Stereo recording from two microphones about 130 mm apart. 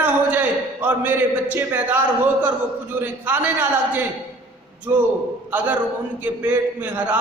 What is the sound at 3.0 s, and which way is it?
A man's voice, 15° right (ahead or behind).